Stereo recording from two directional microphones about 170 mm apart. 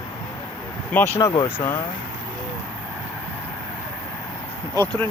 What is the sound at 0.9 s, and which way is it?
Speech, 15° left (ahead or behind).